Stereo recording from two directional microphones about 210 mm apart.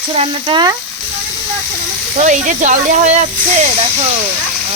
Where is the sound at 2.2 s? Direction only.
35° right (ahead or behind).